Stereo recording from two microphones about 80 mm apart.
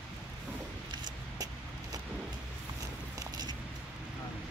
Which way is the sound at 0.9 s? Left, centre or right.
Right.